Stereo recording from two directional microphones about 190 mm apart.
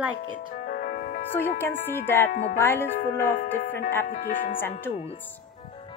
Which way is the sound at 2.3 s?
45° left (ahead or behind).